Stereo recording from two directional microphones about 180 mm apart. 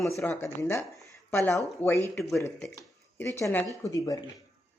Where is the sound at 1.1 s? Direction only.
15° left (ahead or behind).